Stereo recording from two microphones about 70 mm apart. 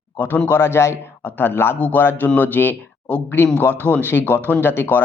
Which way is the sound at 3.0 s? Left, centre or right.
Centre.